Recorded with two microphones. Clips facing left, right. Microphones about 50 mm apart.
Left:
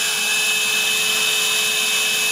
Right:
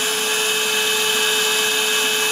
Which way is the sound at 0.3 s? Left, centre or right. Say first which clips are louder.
Left 1 dB; centre.